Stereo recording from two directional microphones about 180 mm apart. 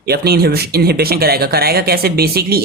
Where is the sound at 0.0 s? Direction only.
60° right (ahead or behind).